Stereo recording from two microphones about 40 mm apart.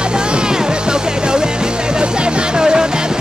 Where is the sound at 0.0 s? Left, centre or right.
Right.